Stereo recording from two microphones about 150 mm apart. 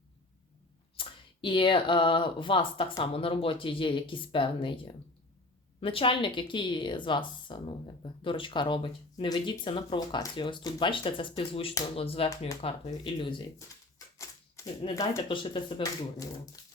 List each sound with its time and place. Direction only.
0.9 s speech: 35° left (ahead or behind)
5.8 s speech: 35° left (ahead or behind)
14.2 s typewriter: 20° left (ahead or behind)
15.3 s speech: 35° left (ahead or behind)